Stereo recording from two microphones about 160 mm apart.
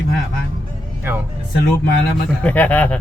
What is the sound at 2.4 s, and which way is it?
Speech, 10° left (ahead or behind).